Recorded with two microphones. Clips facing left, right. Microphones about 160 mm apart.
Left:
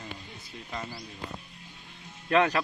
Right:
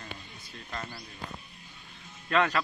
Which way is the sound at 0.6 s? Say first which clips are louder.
Left 2 dB; 10° left (ahead or behind).